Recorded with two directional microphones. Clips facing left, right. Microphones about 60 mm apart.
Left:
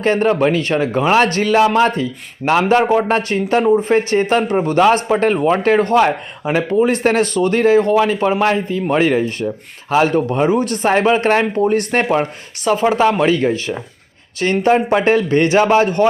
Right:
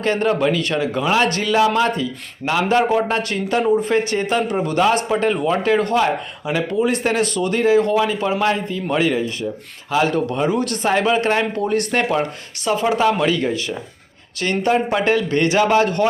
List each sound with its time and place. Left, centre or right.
0.0 s speech: left
10.1 s speech: left